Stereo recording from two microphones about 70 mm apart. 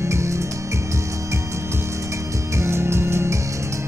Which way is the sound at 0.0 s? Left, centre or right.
Right.